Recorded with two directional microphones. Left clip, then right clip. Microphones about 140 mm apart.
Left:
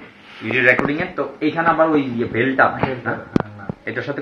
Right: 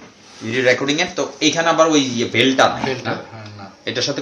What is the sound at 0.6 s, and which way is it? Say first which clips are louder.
Speech: even; 85° right.